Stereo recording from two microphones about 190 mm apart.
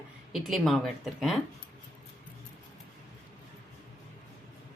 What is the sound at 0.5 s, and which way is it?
Speech, centre (ahead or behind).